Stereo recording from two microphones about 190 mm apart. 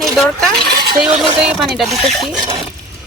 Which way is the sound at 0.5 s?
55° right (ahead or behind).